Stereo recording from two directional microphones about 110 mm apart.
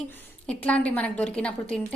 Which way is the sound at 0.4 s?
10° left (ahead or behind).